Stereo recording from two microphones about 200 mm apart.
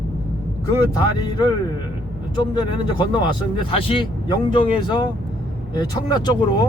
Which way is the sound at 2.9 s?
25° left (ahead or behind).